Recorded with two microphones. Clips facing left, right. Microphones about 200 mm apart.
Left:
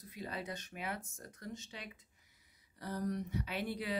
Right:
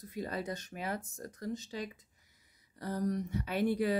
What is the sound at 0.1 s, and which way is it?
Speech, 45° right (ahead or behind).